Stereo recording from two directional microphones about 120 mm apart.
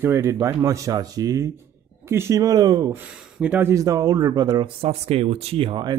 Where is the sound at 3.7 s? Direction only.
25° right (ahead or behind).